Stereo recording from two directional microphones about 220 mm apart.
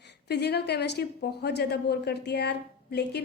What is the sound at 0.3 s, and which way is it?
A woman's voice, 50° left (ahead or behind).